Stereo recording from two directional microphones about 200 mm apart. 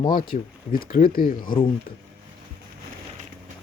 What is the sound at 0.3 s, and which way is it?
Speech, 40° left (ahead or behind).